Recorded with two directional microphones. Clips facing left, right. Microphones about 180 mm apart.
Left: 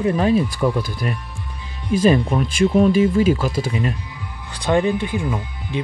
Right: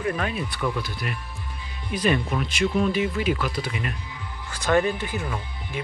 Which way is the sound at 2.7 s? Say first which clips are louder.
Left 10 dB; 45° left (ahead or behind).